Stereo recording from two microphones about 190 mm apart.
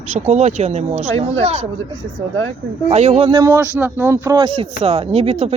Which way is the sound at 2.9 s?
35° right (ahead or behind).